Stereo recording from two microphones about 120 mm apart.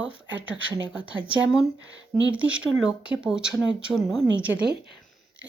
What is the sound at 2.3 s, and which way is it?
Speech, 10° right (ahead or behind).